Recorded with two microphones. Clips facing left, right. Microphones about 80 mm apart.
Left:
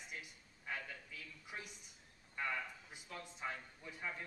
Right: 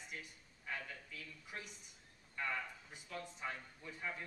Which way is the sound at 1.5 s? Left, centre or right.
Centre.